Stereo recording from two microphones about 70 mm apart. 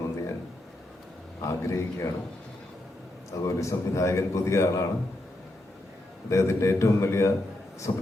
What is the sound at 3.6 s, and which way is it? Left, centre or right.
A man's voice, left.